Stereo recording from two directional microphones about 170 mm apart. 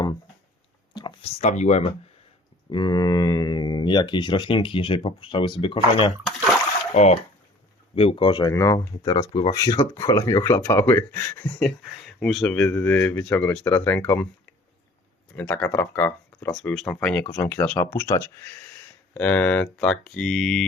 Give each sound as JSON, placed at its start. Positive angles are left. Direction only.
{"t": 0.9, "sound": "speech", "side_deg": 30}
{"t": 2.6, "sound": "speech", "side_deg": 25}
{"t": 6.9, "sound": "speech", "side_deg": 40}
{"t": 11.5, "sound": "speech", "side_deg": 0}
{"t": 15.4, "sound": "speech", "side_deg": 10}
{"t": 16.6, "sound": "speech", "side_deg": 5}